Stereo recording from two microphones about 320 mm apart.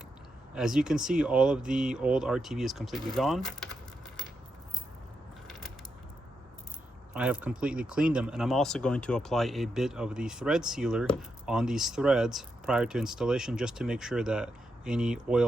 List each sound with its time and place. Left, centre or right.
0.5 s speech: centre
5.5 s mechanisms: centre
7.1 s speech: centre